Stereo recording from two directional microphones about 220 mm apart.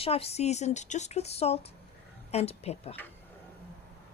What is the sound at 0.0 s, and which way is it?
A woman's voice, 25° left (ahead or behind).